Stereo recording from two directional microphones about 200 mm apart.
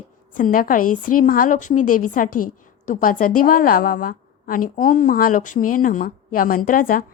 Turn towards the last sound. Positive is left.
turn(degrees=45)  # may be behind; listen again after turning